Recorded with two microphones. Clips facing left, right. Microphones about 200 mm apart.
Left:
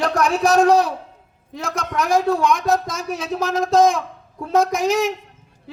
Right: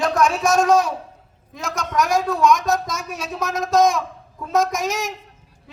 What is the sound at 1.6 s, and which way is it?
A man's voice, 30° left (ahead or behind).